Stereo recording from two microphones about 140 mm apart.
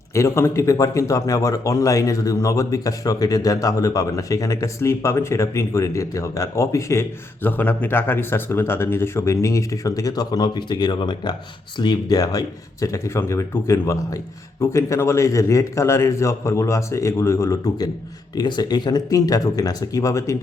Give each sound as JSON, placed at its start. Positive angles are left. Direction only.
{"t": 0.1, "sound": "speech", "side_deg": 20}